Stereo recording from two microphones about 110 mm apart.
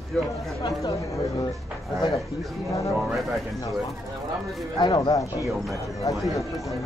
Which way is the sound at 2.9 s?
Centre (ahead or behind).